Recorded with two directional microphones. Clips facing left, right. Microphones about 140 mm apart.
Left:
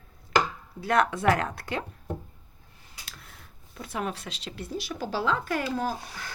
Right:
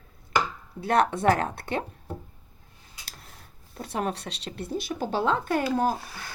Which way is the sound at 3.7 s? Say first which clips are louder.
Right 3 dB; 35° right (ahead or behind).